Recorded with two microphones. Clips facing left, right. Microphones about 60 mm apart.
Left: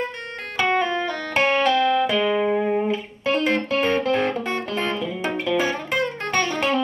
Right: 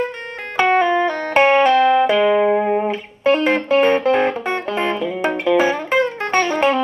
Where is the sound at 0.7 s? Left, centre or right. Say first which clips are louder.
Right 7 dB; right.